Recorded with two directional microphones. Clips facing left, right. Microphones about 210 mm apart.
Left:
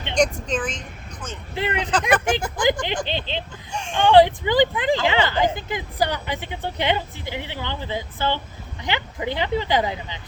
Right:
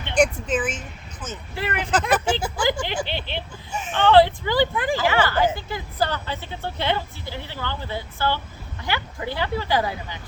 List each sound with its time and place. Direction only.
0.2 s speech: 5° right (ahead or behind)
1.5 s speech: 20° left (ahead or behind)
1.9 s speech: 5° right (ahead or behind)
3.1 s a woman's voice: 20° left (ahead or behind)
3.7 s speech: 5° right (ahead or behind)
3.9 s a woman's voice: 15° left (ahead or behind)